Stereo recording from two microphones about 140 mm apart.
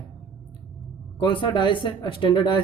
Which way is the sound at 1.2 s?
35° left (ahead or behind).